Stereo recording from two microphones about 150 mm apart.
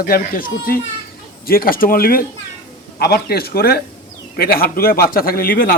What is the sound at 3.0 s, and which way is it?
A man's voice, 90° left.